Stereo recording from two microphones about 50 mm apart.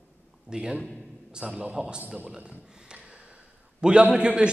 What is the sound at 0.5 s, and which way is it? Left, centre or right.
A man's voice, centre.